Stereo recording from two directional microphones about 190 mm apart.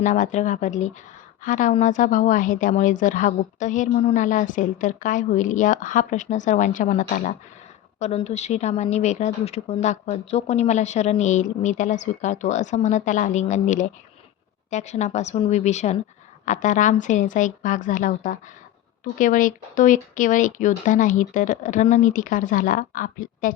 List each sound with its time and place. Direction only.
0.0 s a woman's voice: 40° left (ahead or behind)